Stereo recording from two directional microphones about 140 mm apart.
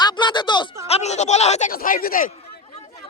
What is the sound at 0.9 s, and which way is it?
Speech, 50° left (ahead or behind).